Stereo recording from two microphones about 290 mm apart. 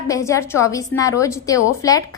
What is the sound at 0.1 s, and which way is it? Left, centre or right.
A woman's voice, centre.